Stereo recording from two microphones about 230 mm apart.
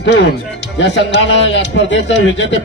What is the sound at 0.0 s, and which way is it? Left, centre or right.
A man's voice, left.